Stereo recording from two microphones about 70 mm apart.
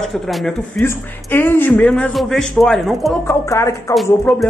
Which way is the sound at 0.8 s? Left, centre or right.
Left.